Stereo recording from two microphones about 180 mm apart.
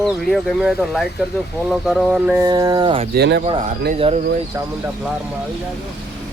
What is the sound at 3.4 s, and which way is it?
Speech, 35° right (ahead or behind).